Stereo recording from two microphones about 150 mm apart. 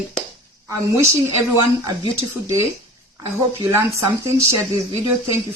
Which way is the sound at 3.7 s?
20° right (ahead or behind).